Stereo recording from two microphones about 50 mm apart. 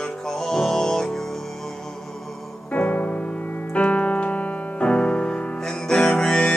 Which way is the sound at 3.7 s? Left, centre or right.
Left.